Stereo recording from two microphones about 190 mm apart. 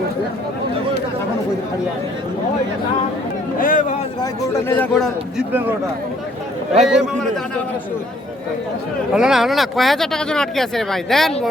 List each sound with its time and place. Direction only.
3.6 s speech: 45° left (ahead or behind)
4.7 s speech: 5° left (ahead or behind)
5.5 s a man's voice: 10° right (ahead or behind)
6.8 s speech: centre (ahead or behind)
9.1 s speech: centre (ahead or behind)